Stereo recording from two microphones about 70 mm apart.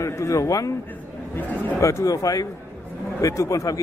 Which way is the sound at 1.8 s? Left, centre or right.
Left.